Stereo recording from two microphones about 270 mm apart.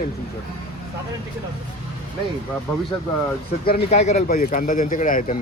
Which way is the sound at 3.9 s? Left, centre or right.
Left.